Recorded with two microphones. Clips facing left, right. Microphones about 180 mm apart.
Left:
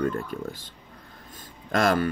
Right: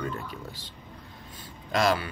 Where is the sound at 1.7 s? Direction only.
50° left (ahead or behind).